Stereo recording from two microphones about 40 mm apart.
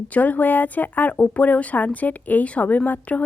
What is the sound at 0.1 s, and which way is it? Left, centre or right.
Speech, left.